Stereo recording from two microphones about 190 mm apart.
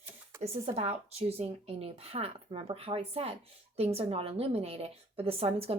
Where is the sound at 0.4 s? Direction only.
30° right (ahead or behind).